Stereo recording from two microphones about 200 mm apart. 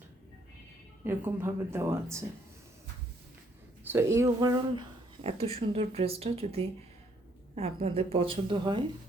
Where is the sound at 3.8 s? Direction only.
10° right (ahead or behind).